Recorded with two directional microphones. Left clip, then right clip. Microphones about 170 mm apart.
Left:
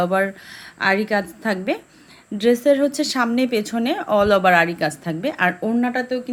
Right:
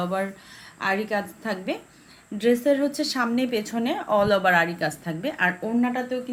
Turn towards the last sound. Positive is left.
turn(degrees=45)  # may be behind; listen again after turning